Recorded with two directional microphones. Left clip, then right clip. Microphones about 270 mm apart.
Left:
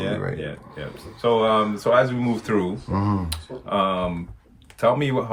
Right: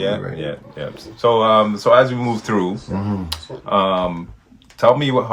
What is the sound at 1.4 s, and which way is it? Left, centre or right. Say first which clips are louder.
Speech: right 6 dB; centre.